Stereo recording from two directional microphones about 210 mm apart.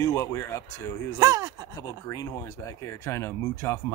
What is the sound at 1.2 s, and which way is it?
Speech, 15° right (ahead or behind).